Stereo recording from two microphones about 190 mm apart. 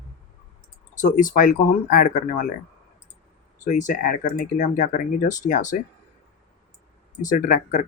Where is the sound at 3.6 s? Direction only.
40° left (ahead or behind).